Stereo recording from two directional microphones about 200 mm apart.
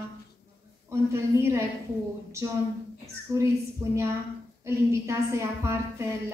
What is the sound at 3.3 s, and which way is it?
Speech, 15° right (ahead or behind).